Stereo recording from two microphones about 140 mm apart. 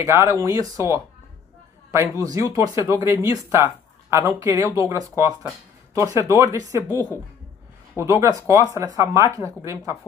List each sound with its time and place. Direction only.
0.0 s speech: 20° right (ahead or behind)
8.0 s speech: 20° right (ahead or behind)